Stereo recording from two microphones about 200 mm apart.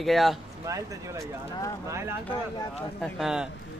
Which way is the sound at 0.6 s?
15° right (ahead or behind).